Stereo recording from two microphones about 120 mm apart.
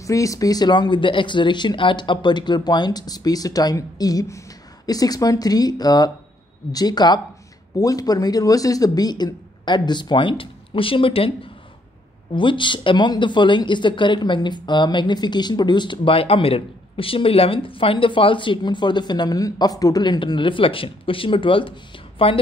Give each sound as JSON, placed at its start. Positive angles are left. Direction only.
{"t": 0.0, "sound": "a woman's voice", "side_deg": 25}